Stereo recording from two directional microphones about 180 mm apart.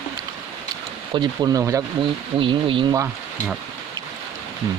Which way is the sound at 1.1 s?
25° right (ahead or behind).